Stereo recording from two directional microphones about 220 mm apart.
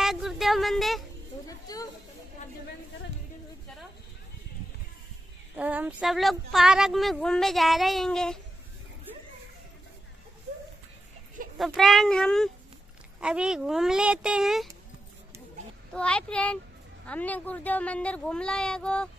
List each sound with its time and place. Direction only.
0.0 s a sound: centre (ahead or behind)
1.7 s chatter: 15° left (ahead or behind)
5.6 s speech: 5° right (ahead or behind)
11.5 s speech: centre (ahead or behind)
15.9 s speech: 5° left (ahead or behind)